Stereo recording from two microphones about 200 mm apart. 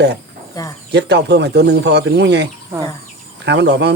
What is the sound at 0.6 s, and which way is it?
Speech, 20° left (ahead or behind).